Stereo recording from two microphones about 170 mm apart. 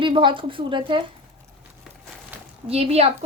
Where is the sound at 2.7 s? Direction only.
35° right (ahead or behind).